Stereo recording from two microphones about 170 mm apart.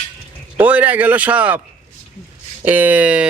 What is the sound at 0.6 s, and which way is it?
Speech, 10° right (ahead or behind).